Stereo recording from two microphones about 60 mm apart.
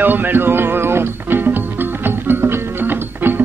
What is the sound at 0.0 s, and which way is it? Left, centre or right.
Music, right.